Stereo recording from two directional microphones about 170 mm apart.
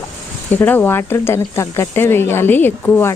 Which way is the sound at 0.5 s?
10° left (ahead or behind).